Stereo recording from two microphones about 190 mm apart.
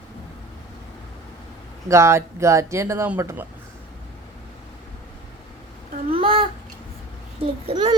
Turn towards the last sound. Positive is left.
turn(degrees=-30)  # may be behind; listen again after turning